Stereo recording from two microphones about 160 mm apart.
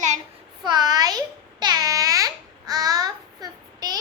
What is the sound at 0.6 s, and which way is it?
Babbling, 25° right (ahead or behind).